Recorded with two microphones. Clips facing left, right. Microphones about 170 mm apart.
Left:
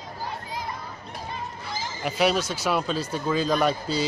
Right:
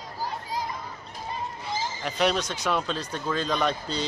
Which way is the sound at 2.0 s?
5° left (ahead or behind).